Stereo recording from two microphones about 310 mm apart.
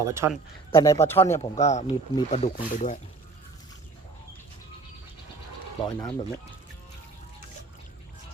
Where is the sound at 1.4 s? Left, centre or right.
Centre.